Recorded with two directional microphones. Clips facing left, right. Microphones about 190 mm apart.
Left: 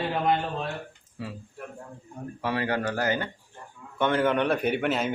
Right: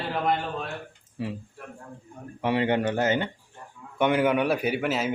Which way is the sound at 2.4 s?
20° right (ahead or behind).